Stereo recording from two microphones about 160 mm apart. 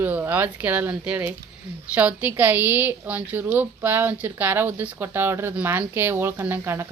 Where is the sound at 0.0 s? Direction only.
10° right (ahead or behind).